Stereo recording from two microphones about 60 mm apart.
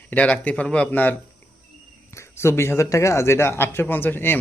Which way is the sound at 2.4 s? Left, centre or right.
Left.